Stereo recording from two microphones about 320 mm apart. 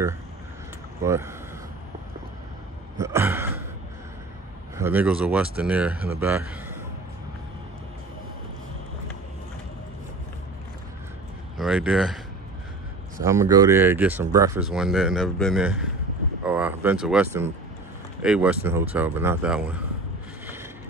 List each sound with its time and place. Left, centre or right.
1.0 s speech: centre
3.0 s gasp: centre
4.7 s speech: centre
11.5 s speech: centre
13.2 s speech: centre